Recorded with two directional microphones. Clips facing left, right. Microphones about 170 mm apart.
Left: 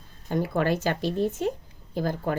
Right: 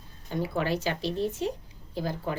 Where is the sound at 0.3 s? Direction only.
50° left (ahead or behind).